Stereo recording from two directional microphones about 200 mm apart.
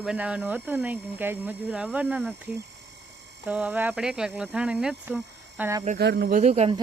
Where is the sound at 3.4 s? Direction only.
5° right (ahead or behind).